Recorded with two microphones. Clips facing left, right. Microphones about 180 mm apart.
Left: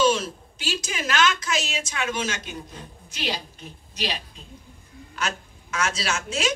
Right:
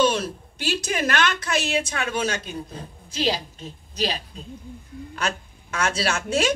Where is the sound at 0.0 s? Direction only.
60° right (ahead or behind).